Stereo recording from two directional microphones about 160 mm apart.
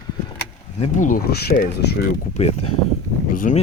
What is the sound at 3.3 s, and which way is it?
Speech, 60° left (ahead or behind).